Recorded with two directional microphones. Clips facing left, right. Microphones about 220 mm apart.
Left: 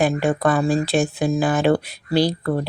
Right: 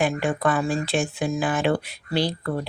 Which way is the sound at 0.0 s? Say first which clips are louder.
Left 4 dB; 40° left (ahead or behind).